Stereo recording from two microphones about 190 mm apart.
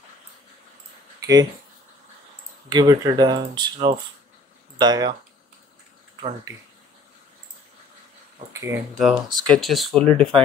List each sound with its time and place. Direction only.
1.2 s speech: 20° right (ahead or behind)
2.7 s speech: 20° right (ahead or behind)
8.5 s speech: 10° right (ahead or behind)
8.9 s speech: centre (ahead or behind)